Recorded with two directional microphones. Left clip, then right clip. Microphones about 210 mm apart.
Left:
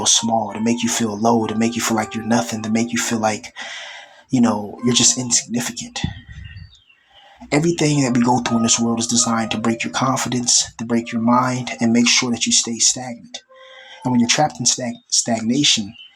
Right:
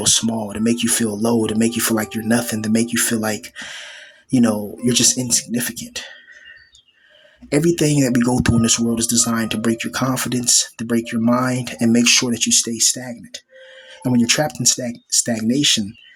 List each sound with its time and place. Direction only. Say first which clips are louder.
0.0 s speech: left 2 dB; 15° right (ahead or behind)
7.8 s speech: right 1 dB; 15° right (ahead or behind)